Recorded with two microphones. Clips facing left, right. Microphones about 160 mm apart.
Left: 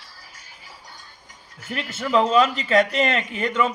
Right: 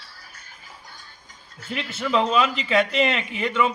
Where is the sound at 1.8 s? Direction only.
45° left (ahead or behind).